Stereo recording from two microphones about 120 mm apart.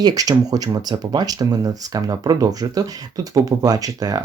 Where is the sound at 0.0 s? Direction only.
30° right (ahead or behind).